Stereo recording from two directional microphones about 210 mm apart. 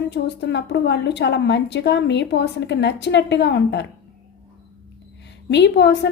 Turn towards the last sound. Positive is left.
turn(degrees=55)  # may be behind; listen again after turning